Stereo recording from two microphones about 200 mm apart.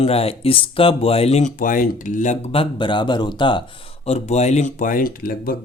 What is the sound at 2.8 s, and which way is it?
A man's voice, 25° left (ahead or behind).